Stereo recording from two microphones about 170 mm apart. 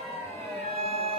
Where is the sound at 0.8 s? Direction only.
35° right (ahead or behind).